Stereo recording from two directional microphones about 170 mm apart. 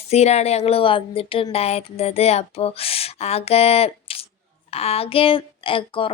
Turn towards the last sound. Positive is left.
turn(degrees=30)  # may be behind; listen again after turning